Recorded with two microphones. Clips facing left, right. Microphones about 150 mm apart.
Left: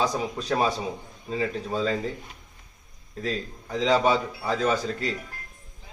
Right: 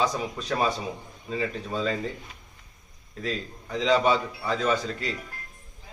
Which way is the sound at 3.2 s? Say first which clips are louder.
Left 1 dB; 35° left (ahead or behind).